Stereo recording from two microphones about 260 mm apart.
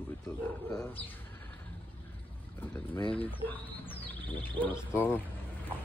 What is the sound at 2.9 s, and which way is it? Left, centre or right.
Speech, centre.